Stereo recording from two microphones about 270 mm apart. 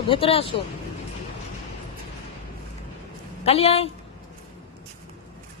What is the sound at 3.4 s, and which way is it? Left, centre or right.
Speech, left.